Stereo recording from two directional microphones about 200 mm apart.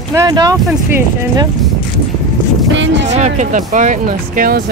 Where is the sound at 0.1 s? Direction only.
20° right (ahead or behind).